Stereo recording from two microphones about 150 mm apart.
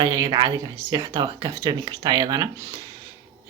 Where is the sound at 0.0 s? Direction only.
20° right (ahead or behind).